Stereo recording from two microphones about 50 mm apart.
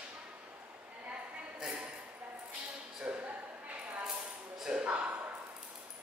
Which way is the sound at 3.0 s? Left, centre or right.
Right.